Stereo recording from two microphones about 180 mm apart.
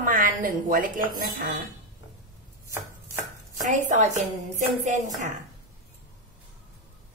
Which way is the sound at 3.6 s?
40° right (ahead or behind).